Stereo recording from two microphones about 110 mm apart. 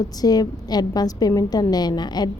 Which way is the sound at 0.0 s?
35° left (ahead or behind).